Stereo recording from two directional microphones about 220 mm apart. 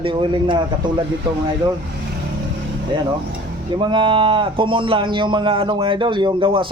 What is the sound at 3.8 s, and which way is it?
Speech, 20° right (ahead or behind).